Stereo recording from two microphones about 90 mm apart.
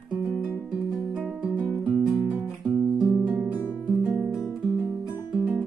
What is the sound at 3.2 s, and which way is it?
Music, 15° right (ahead or behind).